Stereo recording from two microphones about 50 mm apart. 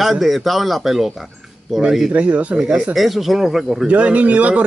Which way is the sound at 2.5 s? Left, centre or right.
Centre.